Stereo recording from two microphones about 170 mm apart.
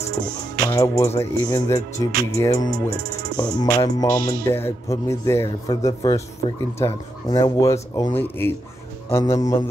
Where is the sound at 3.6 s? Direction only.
20° left (ahead or behind).